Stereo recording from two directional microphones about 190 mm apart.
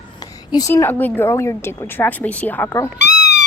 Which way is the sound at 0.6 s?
15° left (ahead or behind).